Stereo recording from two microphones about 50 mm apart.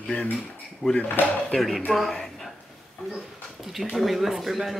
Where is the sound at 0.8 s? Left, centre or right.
Right.